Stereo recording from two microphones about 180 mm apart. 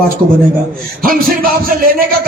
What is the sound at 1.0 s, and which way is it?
A man's voice, 50° right (ahead or behind).